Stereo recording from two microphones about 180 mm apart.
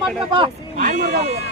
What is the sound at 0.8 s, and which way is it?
Speech, 55° right (ahead or behind).